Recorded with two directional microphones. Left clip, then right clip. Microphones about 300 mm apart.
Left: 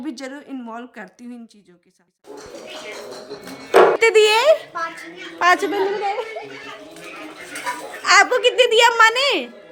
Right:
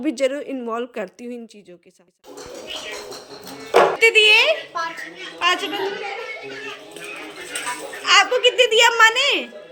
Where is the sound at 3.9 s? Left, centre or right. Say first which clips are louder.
Right 1 dB; centre.